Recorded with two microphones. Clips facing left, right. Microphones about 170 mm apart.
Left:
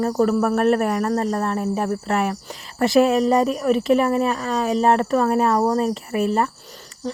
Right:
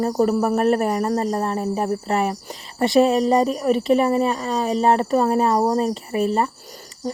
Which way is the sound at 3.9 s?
35° right (ahead or behind).